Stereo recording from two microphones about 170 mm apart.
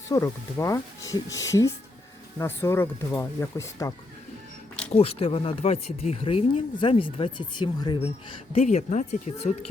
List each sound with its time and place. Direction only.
0.1 s speech: 20° left (ahead or behind)
4.9 s speech: 35° left (ahead or behind)
8.5 s speech: 40° left (ahead or behind)